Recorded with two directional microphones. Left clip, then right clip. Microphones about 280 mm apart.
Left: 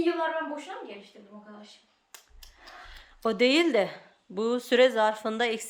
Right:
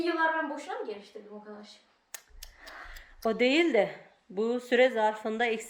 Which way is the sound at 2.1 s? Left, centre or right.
Right.